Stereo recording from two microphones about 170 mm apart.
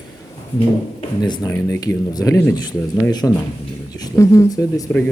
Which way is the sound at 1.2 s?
25° left (ahead or behind).